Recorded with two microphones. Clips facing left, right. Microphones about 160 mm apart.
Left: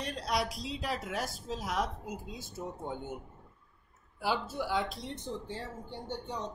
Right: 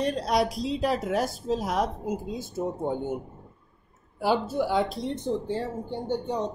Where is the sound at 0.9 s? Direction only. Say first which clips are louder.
Right 10 dB; 40° right (ahead or behind).